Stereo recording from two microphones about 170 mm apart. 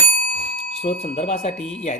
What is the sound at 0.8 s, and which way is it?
Speech, 40° left (ahead or behind).